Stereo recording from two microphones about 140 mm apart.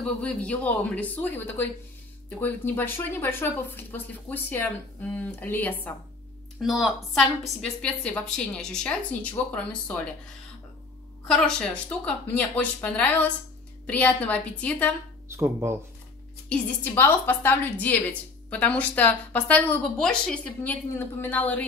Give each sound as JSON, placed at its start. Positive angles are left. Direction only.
{"t": 0.0, "sound": "speech", "side_deg": 5}
{"t": 6.6, "sound": "speech", "side_deg": 0}
{"t": 11.2, "sound": "a woman's voice", "side_deg": 5}
{"t": 15.2, "sound": "speech", "side_deg": -15}
{"t": 16.4, "sound": "speech", "side_deg": 10}